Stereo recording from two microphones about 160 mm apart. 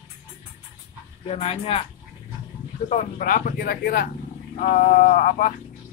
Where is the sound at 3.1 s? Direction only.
60° left (ahead or behind).